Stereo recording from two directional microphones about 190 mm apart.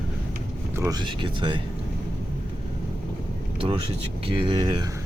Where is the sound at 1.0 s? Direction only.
25° right (ahead or behind).